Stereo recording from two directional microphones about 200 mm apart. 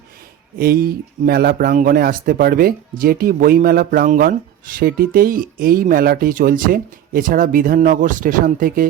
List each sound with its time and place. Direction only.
0.6 s speech: 50° right (ahead or behind)